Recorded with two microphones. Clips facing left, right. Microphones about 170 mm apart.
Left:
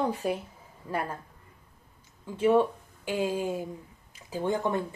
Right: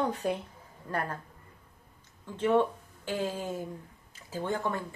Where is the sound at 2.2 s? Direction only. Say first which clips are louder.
Left 3 dB; 10° left (ahead or behind).